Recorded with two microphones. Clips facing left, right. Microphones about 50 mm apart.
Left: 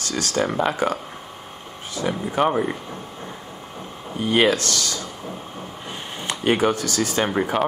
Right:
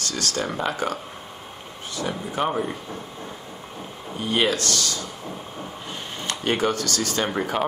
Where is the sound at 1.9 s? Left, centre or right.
Left.